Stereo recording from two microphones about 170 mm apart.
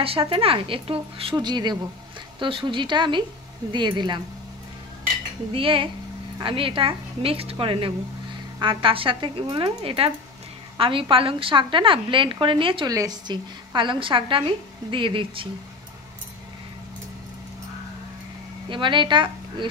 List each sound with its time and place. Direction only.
0.0 s a woman's voice: 35° right (ahead or behind)
5.5 s a woman's voice: 30° right (ahead or behind)
18.7 s a woman's voice: 30° right (ahead or behind)